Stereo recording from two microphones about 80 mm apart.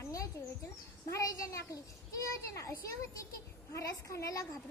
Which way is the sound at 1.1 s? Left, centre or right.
Left.